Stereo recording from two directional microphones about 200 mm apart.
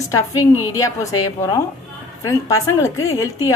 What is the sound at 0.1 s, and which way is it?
Speech, 15° left (ahead or behind).